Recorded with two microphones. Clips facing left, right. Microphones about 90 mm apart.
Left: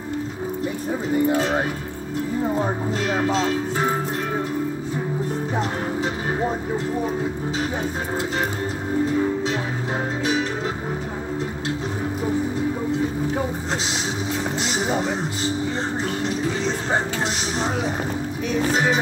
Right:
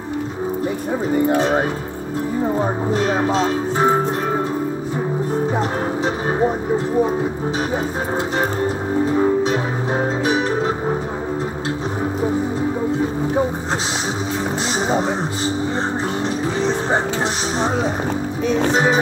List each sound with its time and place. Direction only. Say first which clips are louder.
1.4 s speech: right 4 dB; 20° right (ahead or behind)
10.2 s music: right 3 dB; 25° right (ahead or behind)
18.7 s speech: right 3 dB; 25° right (ahead or behind)